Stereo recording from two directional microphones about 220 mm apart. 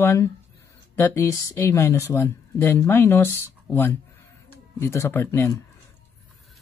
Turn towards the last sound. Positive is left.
turn(degrees=10)  # may be behind; listen again after turning